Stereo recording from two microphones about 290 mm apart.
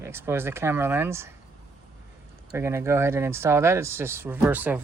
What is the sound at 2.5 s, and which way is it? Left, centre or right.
Speech, centre.